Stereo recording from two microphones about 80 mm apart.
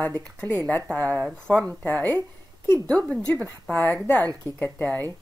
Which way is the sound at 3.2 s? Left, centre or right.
Centre.